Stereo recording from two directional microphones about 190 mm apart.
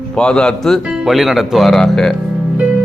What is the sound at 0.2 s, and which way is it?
Speech, 5° left (ahead or behind).